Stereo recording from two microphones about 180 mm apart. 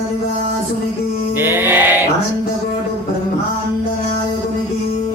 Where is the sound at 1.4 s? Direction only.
10° right (ahead or behind).